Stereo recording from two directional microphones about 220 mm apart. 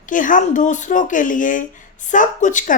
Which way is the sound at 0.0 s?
35° left (ahead or behind).